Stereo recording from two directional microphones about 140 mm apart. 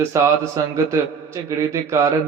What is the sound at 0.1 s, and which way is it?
A man's voice, 20° right (ahead or behind).